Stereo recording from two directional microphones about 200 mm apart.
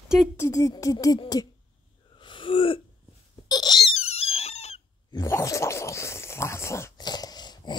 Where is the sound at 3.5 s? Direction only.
20° left (ahead or behind).